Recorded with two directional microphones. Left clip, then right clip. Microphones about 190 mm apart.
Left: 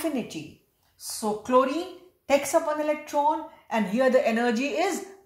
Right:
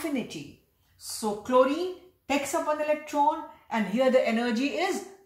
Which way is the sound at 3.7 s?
35° left (ahead or behind).